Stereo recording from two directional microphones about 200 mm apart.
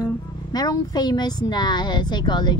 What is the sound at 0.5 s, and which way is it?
A woman's voice, 20° left (ahead or behind).